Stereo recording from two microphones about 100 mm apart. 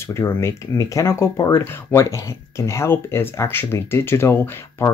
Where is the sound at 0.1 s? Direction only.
30° left (ahead or behind).